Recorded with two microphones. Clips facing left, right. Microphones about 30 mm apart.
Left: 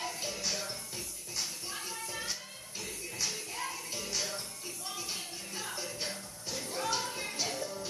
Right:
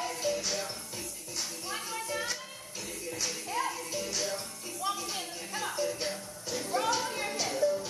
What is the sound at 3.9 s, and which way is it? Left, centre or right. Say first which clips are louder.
Music: right 1 dB; centre.